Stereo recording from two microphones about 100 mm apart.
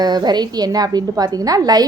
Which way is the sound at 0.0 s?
45° right (ahead or behind).